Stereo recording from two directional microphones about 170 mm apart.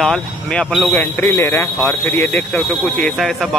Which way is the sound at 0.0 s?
5° left (ahead or behind).